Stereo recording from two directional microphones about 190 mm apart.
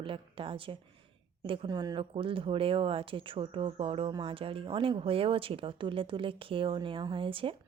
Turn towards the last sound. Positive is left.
turn(degrees=-25)  # may be behind; listen again after turning